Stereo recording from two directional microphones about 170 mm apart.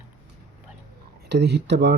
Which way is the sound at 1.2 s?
80° right.